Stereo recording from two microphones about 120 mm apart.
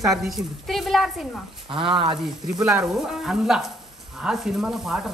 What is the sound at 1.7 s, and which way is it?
Speech, 45° right (ahead or behind).